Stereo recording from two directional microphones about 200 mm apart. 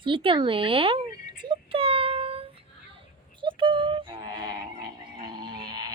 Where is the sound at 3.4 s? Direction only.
25° right (ahead or behind).